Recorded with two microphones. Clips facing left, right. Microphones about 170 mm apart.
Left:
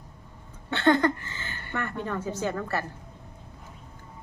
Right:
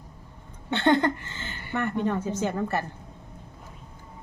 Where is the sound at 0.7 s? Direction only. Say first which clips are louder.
Even; 20° right (ahead or behind).